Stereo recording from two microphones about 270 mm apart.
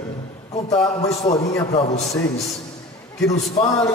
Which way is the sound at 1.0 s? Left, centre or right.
Left.